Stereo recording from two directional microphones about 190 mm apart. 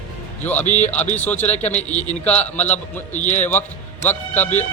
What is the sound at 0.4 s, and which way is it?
Speech, 10° left (ahead or behind).